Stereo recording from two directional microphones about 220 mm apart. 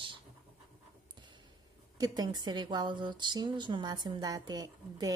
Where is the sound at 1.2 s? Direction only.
20° right (ahead or behind).